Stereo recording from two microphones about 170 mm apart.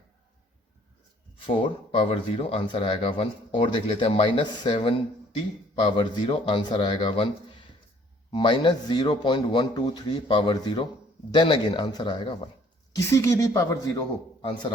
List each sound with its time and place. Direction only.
1.5 s a man's voice: 30° left (ahead or behind)
8.3 s a man's voice: 30° left (ahead or behind)
13.1 s a man's voice: 15° left (ahead or behind)